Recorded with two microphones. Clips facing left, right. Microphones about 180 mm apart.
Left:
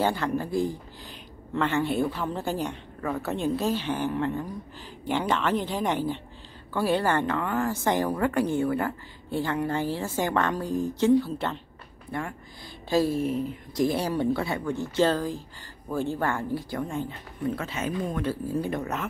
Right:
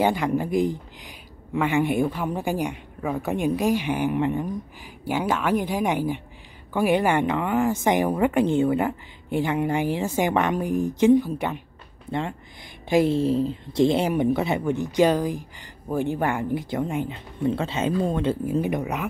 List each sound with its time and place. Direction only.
0.0 s a woman's voice: 15° right (ahead or behind)
5.0 s a woman's voice: 10° right (ahead or behind)